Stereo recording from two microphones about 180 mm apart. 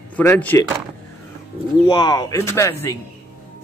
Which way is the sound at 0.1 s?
10° left (ahead or behind).